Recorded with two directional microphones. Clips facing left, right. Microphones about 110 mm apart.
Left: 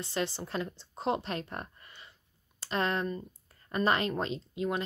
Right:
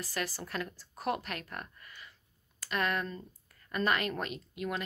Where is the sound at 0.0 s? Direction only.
25° left (ahead or behind).